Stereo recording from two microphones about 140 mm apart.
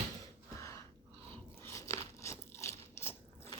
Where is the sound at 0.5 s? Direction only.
20° left (ahead or behind).